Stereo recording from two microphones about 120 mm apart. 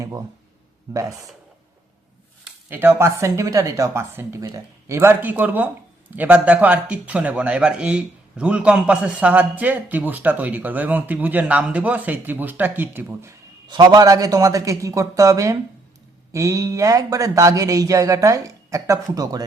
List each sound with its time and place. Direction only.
2.6 s a man's voice: 20° right (ahead or behind)
13.7 s speech: 40° right (ahead or behind)